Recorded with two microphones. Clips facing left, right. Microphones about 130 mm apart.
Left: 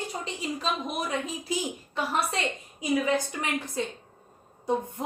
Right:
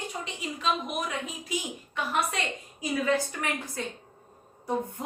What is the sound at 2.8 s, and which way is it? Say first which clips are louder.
A woman's voice: left 1 dB; 20° left (ahead or behind).